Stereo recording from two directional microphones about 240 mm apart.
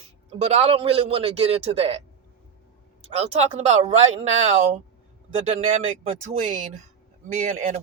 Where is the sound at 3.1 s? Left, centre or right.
Right.